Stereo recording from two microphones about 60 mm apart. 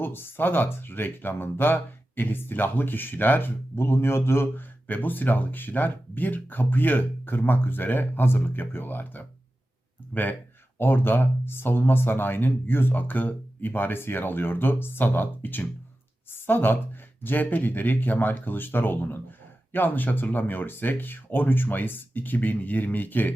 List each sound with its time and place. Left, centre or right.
0.0 s speech: left
10.8 s speech: left